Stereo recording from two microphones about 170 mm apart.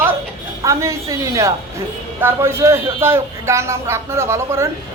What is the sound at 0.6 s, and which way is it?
A woman's voice, 20° right (ahead or behind).